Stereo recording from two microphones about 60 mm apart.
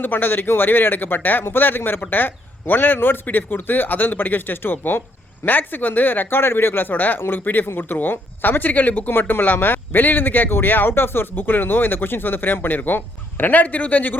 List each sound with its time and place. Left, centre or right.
0.0 s speech: left